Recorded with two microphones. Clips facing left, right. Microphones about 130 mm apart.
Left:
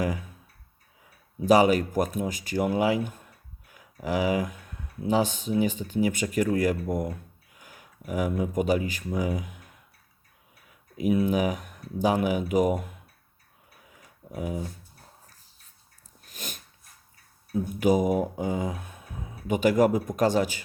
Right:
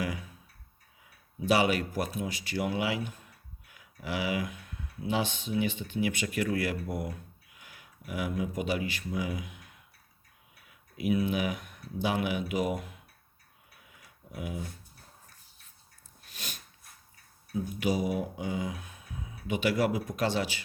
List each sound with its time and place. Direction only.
0.0 s mantra: 45° left (ahead or behind)
1.4 s speech: 40° left (ahead or behind)
10.9 s mantra: 40° left (ahead or behind)
13.9 s a sound: 40° left (ahead or behind)
16.2 s dog: 45° left (ahead or behind)
17.7 s mantra: 45° left (ahead or behind)